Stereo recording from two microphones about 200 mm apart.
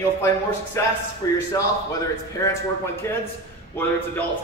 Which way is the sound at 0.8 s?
15° left (ahead or behind).